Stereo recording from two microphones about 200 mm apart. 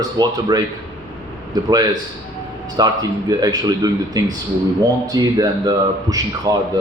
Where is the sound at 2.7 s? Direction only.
20° right (ahead or behind).